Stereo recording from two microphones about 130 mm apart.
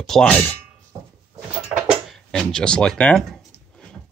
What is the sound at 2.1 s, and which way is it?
Speech, 5° left (ahead or behind).